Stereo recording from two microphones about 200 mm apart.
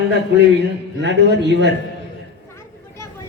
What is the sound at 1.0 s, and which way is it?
Speech, 60° right (ahead or behind).